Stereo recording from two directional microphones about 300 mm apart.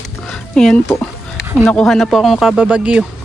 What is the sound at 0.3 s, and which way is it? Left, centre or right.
Speech, centre.